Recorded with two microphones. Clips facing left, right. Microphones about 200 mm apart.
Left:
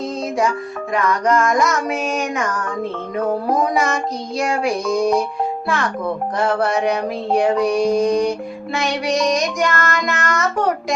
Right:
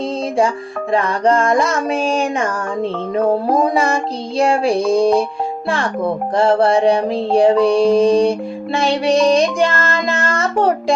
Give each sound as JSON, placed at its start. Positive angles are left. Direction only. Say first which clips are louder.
{"t": 0.9, "sound": "child singing", "louder": "right 2 dB", "side_deg": -30}
{"t": 3.2, "sound": "music", "louder": "right 4 dB", "side_deg": -30}